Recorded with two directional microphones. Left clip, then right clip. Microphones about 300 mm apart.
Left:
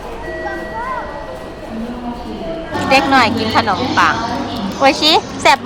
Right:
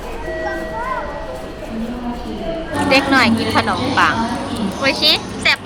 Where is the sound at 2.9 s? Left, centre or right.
Centre.